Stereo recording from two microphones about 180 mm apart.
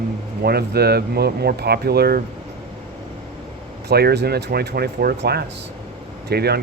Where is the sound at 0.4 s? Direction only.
60° right (ahead or behind).